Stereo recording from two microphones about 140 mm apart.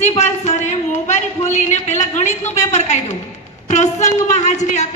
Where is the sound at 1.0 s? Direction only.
55° left (ahead or behind).